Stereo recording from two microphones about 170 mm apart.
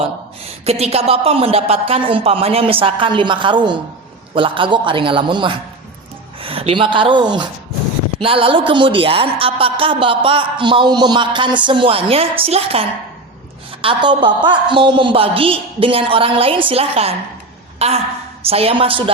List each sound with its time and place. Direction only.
0.6 s a woman's voice: 35° right (ahead or behind)